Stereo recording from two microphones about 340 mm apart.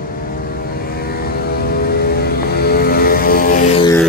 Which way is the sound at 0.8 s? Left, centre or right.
Left.